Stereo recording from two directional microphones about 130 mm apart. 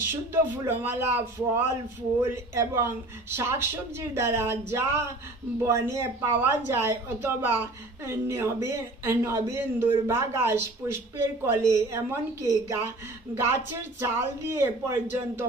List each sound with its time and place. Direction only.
0.1 s a man's voice: 15° right (ahead or behind)